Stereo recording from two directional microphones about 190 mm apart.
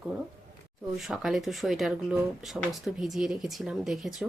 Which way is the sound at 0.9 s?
Centre (ahead or behind).